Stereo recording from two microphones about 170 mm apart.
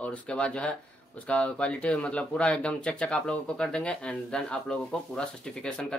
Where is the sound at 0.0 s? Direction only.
5° left (ahead or behind).